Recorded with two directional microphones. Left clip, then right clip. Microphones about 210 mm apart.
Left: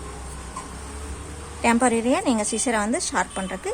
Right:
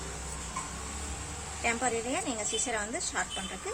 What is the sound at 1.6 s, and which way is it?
A woman's voice, 50° left (ahead or behind).